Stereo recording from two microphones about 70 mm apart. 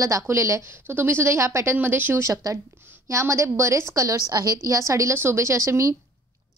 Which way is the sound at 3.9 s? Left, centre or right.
Right.